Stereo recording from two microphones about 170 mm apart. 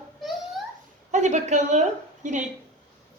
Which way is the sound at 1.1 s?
45° right (ahead or behind).